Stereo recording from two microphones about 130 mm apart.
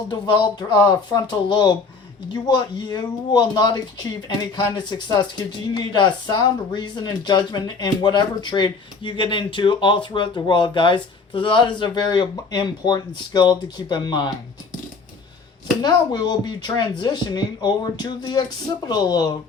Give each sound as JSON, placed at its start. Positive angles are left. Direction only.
{"t": 0.1, "sound": "speech", "side_deg": 35}
{"t": 15.8, "sound": "speech", "side_deg": 30}